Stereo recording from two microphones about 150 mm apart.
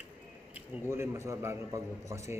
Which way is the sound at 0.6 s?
15° right (ahead or behind).